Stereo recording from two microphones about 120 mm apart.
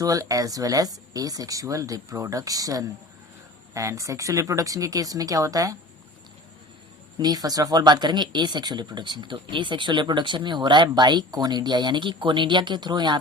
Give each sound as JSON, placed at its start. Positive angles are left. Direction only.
{"t": 0.0, "sound": "speech", "side_deg": -30}
{"t": 7.2, "sound": "speech", "side_deg": -35}